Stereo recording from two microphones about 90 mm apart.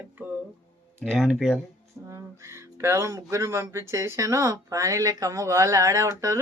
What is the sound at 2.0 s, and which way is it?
Speech, 30° right (ahead or behind).